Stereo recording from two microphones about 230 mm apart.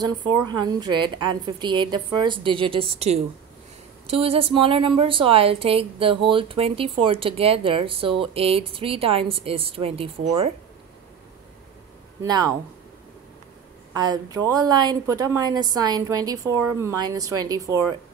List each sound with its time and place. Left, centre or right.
0.0 s a woman's voice: centre
12.2 s a woman's voice: centre
13.9 s a woman's voice: centre